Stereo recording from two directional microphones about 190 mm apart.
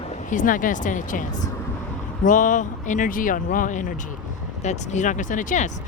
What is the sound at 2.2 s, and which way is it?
Speech, 45° left (ahead or behind).